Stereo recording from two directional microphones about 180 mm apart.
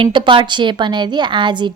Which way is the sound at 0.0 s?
25° right (ahead or behind).